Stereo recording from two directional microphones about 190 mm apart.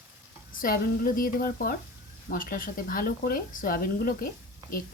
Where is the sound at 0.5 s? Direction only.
50° left (ahead or behind).